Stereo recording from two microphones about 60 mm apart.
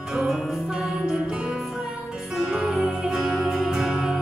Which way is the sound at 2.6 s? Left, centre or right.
Centre.